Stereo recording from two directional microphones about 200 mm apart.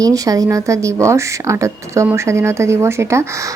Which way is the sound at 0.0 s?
15° right (ahead or behind).